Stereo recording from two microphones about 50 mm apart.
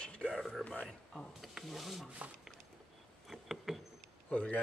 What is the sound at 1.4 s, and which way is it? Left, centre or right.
Speech, centre.